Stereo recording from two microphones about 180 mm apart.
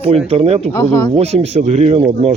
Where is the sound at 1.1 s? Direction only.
35° right (ahead or behind).